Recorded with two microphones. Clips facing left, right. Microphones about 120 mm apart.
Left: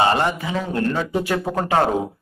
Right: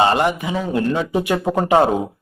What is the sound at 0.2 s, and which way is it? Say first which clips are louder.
A man's voice: right 3 dB; 15° right (ahead or behind).